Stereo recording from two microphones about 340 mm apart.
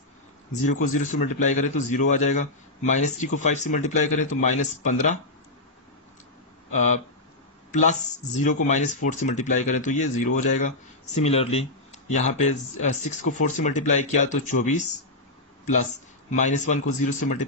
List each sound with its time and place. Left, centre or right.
0.9 s speech: left
6.7 s speech: left
16.3 s speech: left